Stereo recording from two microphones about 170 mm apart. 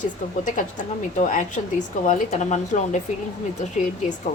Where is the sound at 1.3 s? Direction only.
45° left (ahead or behind).